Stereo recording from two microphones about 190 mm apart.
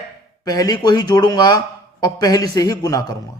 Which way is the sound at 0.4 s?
20° left (ahead or behind).